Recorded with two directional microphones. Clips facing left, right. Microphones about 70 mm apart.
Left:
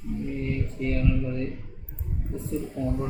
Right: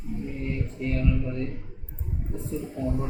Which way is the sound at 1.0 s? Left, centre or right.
Right.